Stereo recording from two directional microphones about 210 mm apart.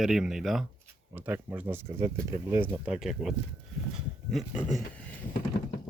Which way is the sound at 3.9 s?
5° right (ahead or behind).